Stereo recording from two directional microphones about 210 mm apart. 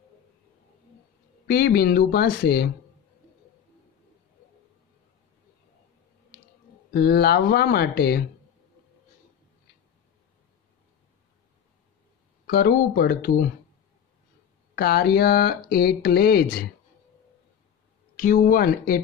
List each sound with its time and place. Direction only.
1.5 s speech: 50° left (ahead or behind)
6.9 s speech: 50° left (ahead or behind)
12.4 s speech: 45° left (ahead or behind)
14.8 s speech: 50° left (ahead or behind)
18.1 s speech: 40° left (ahead or behind)